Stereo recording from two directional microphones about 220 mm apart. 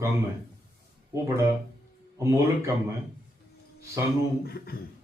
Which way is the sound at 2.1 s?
15° right (ahead or behind).